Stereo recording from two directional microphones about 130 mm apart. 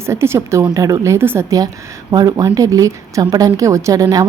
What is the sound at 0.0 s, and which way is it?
A woman's voice, 20° right (ahead or behind).